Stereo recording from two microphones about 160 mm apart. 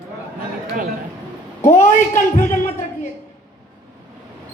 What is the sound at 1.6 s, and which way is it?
Speech, 55° left (ahead or behind).